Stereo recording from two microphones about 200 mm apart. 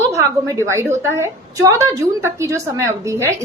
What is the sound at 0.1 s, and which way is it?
A woman's voice, 15° right (ahead or behind).